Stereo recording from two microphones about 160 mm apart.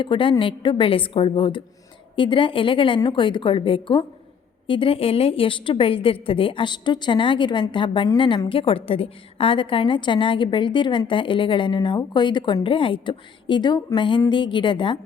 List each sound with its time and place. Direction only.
0.0 s a woman's voice: 30° left (ahead or behind)